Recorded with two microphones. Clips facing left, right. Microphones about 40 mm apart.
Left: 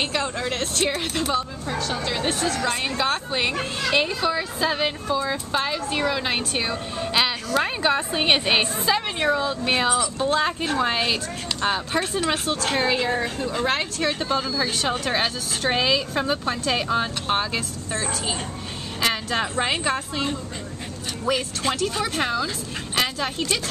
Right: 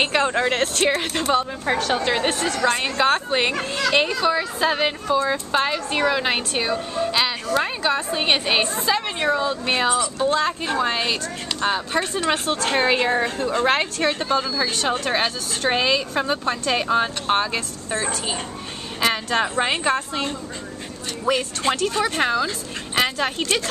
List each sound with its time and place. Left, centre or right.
0.0 s speech: right
1.7 s a woman's voice: right
2.0 s speech: right
2.6 s a woman's voice: centre
7.0 s a woman's voice: centre
12.8 s speech: right
13.5 s a woman's voice: centre